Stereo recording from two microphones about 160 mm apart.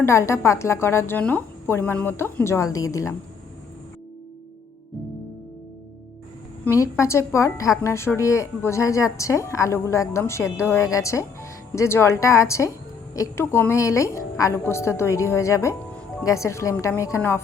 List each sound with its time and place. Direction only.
0.0 s a woman's voice: 15° left (ahead or behind)
6.7 s a woman's voice: 20° left (ahead or behind)